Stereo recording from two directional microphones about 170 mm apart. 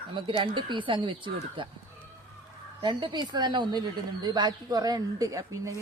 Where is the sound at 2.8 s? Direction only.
25° right (ahead or behind).